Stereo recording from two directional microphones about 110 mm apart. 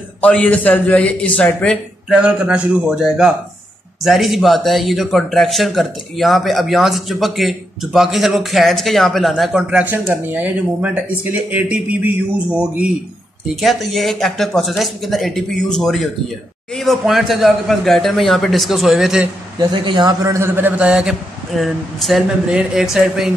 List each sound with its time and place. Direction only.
0.2 s a man's voice: 10° left (ahead or behind)
2.0 s a man's voice: 10° right (ahead or behind)
13.6 s speech: centre (ahead or behind)
19.7 s speech: 50° right (ahead or behind)
20.2 s a man's voice: 25° right (ahead or behind); by 23.3 s 5° right (ahead or behind)